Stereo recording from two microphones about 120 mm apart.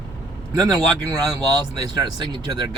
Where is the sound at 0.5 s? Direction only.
30° right (ahead or behind).